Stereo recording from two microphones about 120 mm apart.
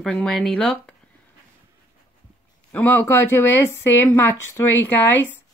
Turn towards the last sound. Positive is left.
turn(degrees=15)  # may be behind; listen again after turning